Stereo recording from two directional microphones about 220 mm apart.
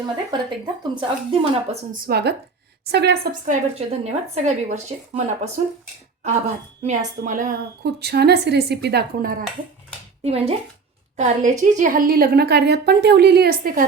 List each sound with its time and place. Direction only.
0.3 s a woman's voice: 20° right (ahead or behind)
1.9 s a woman's voice: 45° right (ahead or behind)
3.4 s speech: 30° right (ahead or behind)
6.8 s a woman's voice: 35° right (ahead or behind)
10.2 s a woman's voice: 25° right (ahead or behind)